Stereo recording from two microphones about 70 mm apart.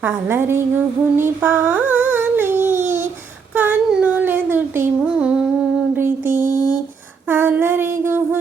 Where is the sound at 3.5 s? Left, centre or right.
Right.